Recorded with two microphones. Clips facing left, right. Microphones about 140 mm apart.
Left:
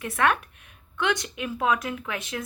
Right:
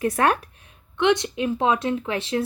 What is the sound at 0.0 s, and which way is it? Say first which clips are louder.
A woman's voice: right 4 dB; 35° right (ahead or behind).